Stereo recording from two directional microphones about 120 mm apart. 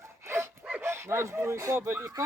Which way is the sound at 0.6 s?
15° right (ahead or behind).